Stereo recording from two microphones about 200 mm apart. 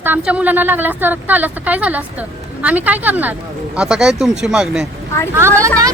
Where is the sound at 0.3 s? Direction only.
5° right (ahead or behind).